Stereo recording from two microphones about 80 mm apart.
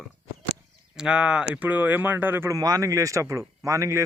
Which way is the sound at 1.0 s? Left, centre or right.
Centre.